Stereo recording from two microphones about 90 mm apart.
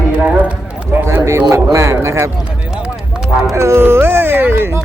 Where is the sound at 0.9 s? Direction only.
25° right (ahead or behind).